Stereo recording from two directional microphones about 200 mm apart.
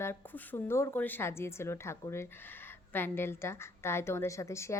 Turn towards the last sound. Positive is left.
turn(degrees=15)  # may be behind; listen again after turning